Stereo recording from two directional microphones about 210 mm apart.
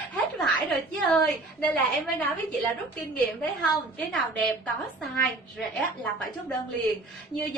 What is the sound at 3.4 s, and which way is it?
Speech, 5° left (ahead or behind).